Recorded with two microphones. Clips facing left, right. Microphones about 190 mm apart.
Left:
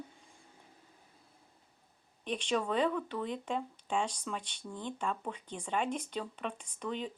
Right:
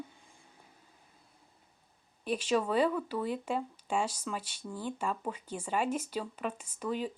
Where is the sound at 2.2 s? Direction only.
5° right (ahead or behind).